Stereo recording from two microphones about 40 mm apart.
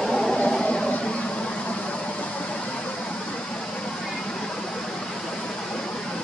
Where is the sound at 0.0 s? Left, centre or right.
Centre.